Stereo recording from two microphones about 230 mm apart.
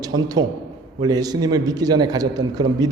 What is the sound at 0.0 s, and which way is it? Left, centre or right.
A man's voice, centre.